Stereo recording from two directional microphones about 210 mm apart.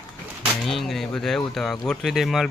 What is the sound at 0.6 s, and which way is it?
Speech, centre (ahead or behind).